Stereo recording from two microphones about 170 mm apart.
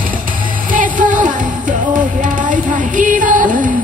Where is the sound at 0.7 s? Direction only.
50° right (ahead or behind).